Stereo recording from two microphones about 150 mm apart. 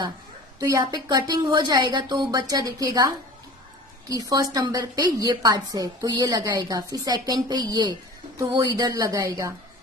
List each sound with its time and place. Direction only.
0.6 s a woman's voice: 25° right (ahead or behind)